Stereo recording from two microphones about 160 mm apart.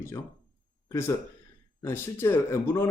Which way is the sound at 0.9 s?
15° left (ahead or behind).